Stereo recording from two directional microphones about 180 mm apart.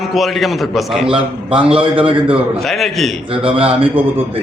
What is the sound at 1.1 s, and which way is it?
A man's voice, 30° right (ahead or behind).